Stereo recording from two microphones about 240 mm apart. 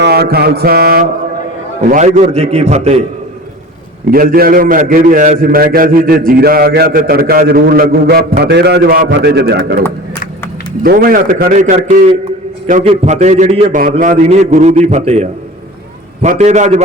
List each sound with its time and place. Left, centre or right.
0.0 s mantra: right
1.9 s a man's voice: right
4.1 s a man's voice: right
10.8 s a man's voice: right